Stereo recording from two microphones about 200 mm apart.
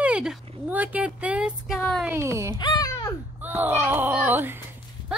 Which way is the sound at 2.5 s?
20° left (ahead or behind).